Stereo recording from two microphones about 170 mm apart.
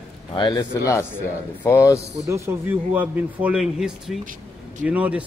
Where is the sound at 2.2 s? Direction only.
15° right (ahead or behind).